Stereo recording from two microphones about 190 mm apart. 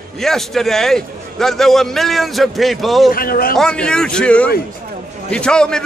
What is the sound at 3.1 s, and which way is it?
Speech, 50° left (ahead or behind).